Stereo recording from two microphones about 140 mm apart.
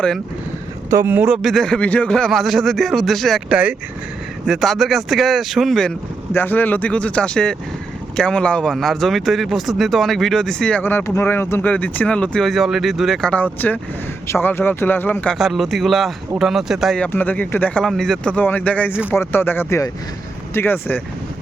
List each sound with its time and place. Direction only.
0.9 s a man's voice: 20° right (ahead or behind)
1.4 s speech: centre (ahead or behind)
3.5 s a man's voice: 10° right (ahead or behind)
6.3 s speech: 15° left (ahead or behind)
15.4 s speech: centre (ahead or behind)
17.1 s speech: 15° left (ahead or behind)